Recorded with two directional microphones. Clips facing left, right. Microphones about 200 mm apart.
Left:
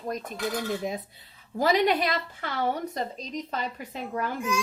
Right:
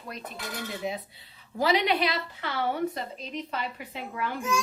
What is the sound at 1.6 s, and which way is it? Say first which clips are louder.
A woman's voice: left 2 dB; 45° left (ahead or behind).